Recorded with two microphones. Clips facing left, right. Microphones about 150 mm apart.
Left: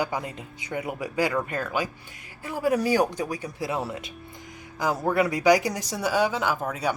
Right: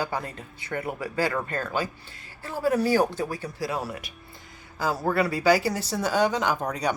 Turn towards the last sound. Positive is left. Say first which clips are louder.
# right 1 dB
turn(degrees=5)  # may be behind; listen again after turning